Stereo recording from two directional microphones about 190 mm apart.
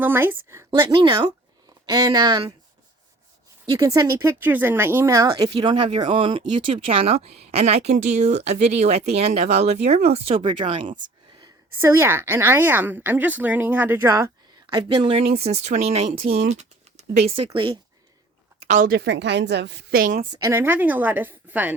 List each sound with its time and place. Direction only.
0.0 s a woman's voice: 10° right (ahead or behind)
3.8 s a woman's voice: 15° right (ahead or behind)
18.7 s a woman's voice: 50° right (ahead or behind)
20.3 s a woman's voice: 15° right (ahead or behind)